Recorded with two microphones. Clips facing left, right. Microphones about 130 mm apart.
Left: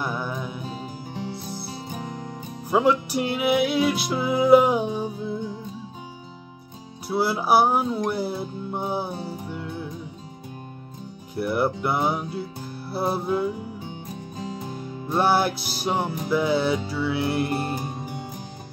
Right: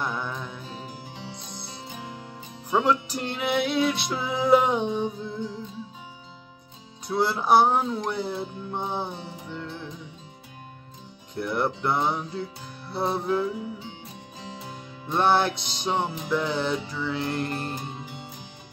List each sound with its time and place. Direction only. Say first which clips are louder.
0.0 s music: left 2 dB; 10° left (ahead or behind)
1.9 s music: left 4 dB; 40° left (ahead or behind)
2.7 s music: left 3 dB; 10° left (ahead or behind)
7.1 s music: even; 5° left (ahead or behind)
11.3 s music: left 3 dB; 5° left (ahead or behind)
15.0 s music: left 1 dB; 10° left (ahead or behind)
17.9 s music: left 5 dB; 50° left (ahead or behind)